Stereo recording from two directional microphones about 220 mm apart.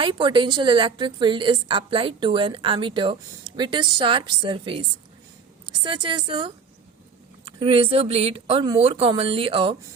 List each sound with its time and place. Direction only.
0.0 s a woman's voice: 20° right (ahead or behind)